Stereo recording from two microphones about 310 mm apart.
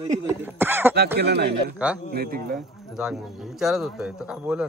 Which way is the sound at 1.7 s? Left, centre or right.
Centre.